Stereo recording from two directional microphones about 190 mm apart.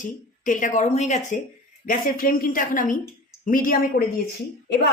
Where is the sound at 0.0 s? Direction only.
45° left (ahead or behind).